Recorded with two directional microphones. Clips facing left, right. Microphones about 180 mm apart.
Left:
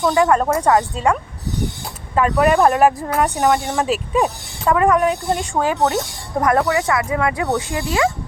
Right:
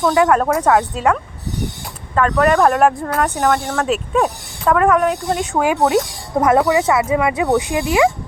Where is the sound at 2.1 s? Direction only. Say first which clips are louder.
Right 1 dB; 10° left (ahead or behind).